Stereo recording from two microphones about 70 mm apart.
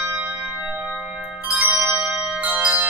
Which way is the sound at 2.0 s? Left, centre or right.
Centre.